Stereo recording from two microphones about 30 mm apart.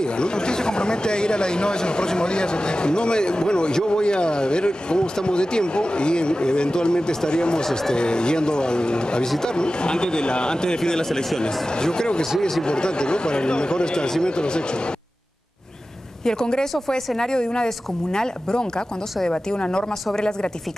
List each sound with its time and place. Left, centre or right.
0.0 s speech: left
7.6 s speech: centre
7.9 s speech: left
16.3 s speech: left